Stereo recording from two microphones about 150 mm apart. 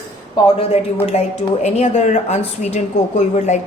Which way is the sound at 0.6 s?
45° left (ahead or behind).